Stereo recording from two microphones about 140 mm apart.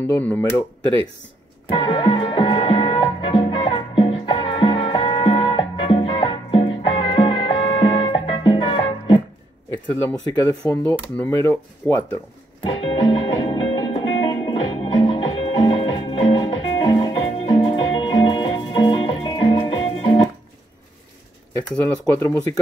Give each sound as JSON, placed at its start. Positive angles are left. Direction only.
{"t": 0.0, "sound": "speech", "side_deg": 15}
{"t": 1.7, "sound": "music", "side_deg": 40}
{"t": 10.0, "sound": "speech", "side_deg": 25}
{"t": 12.6, "sound": "music", "side_deg": 40}
{"t": 21.7, "sound": "speech", "side_deg": 15}